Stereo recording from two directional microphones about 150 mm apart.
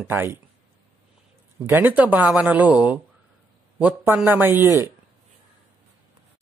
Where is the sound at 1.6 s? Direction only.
15° right (ahead or behind).